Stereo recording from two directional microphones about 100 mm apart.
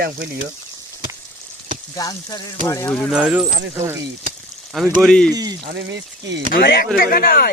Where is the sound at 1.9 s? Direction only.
40° left (ahead or behind).